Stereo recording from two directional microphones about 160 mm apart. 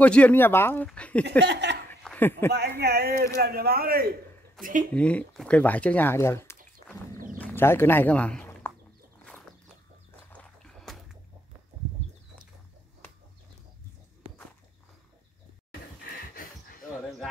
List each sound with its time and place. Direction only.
0.0 s speech: 10° left (ahead or behind)
1.4 s speech: 90° right
2.0 s a sound: 10° left (ahead or behind)
2.8 s speech: 85° right
3.3 s speech: 75° right (ahead or behind)
4.6 s speech: 5° left (ahead or behind)
7.3 s a sound: 10° left (ahead or behind)
10.3 s music: 5° left (ahead or behind)